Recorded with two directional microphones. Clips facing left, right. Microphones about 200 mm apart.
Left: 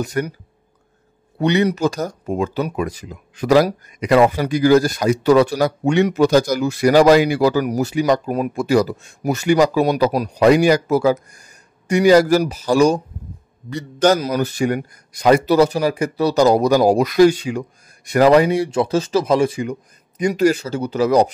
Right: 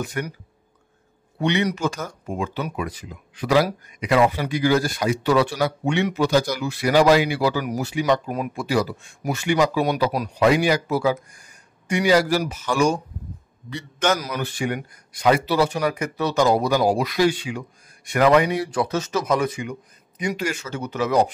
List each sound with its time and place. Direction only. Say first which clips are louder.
0.0 s speech: left 6 dB; 40° left (ahead or behind)
1.4 s speech: left 5 dB; 40° left (ahead or behind)
15.8 s speech: left 5 dB; 30° left (ahead or behind)